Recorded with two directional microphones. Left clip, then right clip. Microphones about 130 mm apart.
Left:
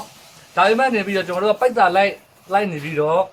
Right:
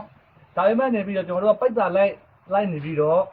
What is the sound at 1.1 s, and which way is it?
Speech, 35° left (ahead or behind).